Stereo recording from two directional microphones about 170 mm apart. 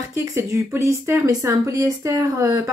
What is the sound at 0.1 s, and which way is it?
Speech, 15° right (ahead or behind).